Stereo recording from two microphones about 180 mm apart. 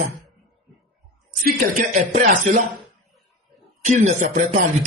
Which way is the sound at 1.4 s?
55° right (ahead or behind).